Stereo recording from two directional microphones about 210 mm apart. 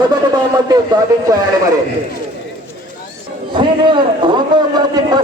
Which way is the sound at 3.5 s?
20° right (ahead or behind).